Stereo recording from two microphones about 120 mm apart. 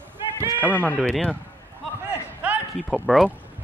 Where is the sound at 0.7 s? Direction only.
15° left (ahead or behind).